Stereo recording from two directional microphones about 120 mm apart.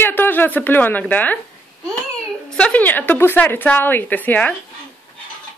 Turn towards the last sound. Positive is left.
turn(degrees=15)  # may be behind; listen again after turning